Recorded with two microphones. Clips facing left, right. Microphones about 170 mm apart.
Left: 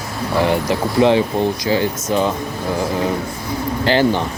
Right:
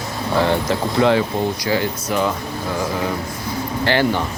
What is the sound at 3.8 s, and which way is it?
Speech, 20° left (ahead or behind).